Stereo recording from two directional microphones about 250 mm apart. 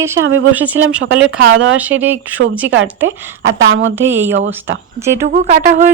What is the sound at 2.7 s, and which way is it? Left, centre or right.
Speech, right.